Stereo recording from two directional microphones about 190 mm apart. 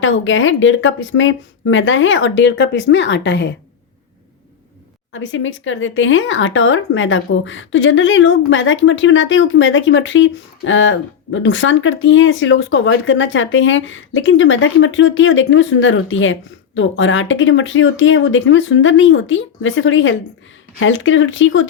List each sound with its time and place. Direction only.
0.0 s speech: 90° left; by 3.5 s 70° left (ahead or behind)
5.1 s speech: 90° left